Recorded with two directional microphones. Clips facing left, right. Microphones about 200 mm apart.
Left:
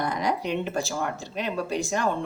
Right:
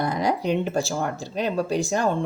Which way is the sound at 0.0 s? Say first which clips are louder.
Right 3 dB; 30° right (ahead or behind).